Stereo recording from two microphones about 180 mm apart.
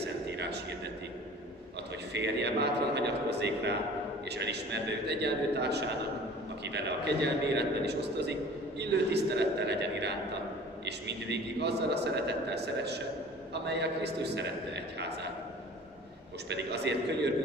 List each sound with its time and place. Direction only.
0.0 s a sound: 70° right (ahead or behind)
2.1 s a man's voice: 70° right (ahead or behind)
16.4 s a man's voice: 70° right (ahead or behind)